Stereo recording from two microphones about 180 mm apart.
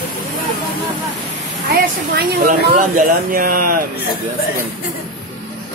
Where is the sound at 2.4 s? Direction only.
60° right (ahead or behind).